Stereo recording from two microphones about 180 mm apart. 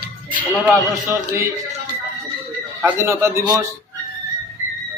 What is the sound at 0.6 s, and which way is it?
Speech, 10° right (ahead or behind).